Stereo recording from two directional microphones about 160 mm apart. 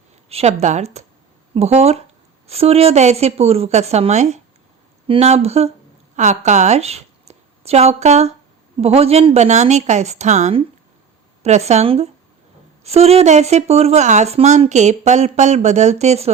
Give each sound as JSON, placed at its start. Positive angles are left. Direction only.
{"t": 0.3, "sound": "a woman's voice", "side_deg": -40}